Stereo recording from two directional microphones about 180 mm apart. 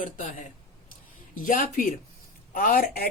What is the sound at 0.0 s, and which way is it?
Speech, 45° left (ahead or behind).